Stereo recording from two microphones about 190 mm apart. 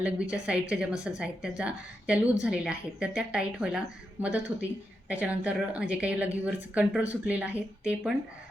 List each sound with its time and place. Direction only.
0.0 s a woman's voice: 5° right (ahead or behind)